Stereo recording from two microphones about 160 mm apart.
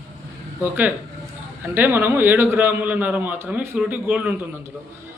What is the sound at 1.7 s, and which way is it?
Speech, 10° right (ahead or behind).